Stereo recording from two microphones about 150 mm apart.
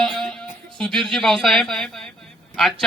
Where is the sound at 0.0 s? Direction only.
Centre (ahead or behind).